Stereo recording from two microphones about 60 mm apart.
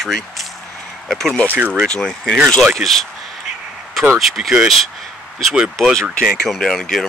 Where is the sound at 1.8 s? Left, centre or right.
Centre.